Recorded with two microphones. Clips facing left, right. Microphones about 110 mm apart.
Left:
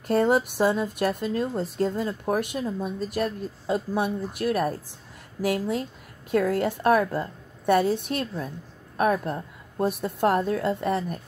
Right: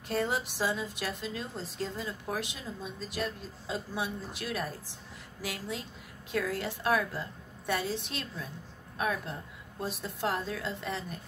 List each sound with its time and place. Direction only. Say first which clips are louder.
0.1 s a woman's voice: left 10 dB; 50° left (ahead or behind)